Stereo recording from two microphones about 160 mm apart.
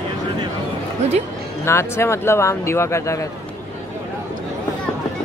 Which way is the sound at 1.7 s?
15° left (ahead or behind).